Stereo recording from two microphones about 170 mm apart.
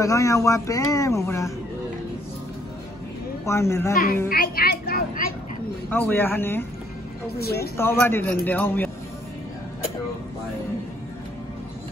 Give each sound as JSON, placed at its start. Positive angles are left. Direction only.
{"t": 0.0, "sound": "speech", "side_deg": 20}
{"t": 3.4, "sound": "speech", "side_deg": 15}
{"t": 3.9, "sound": "a child's voice", "side_deg": 60}
{"t": 5.9, "sound": "speech", "side_deg": 10}
{"t": 7.3, "sound": "speech", "side_deg": 65}
{"t": 7.7, "sound": "speech", "side_deg": 15}